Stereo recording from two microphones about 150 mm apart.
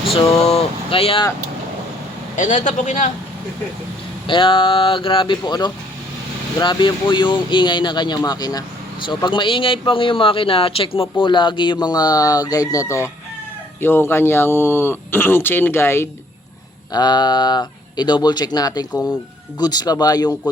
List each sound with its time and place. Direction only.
0.1 s speech: 40° left (ahead or behind)
2.3 s a man's voice: 55° left (ahead or behind)
4.3 s speech: 35° left (ahead or behind); by 16.0 s 15° left (ahead or behind)
16.9 s speech: 30° left (ahead or behind)